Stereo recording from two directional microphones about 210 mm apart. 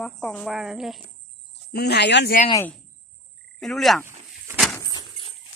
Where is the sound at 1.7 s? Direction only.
50° left (ahead or behind).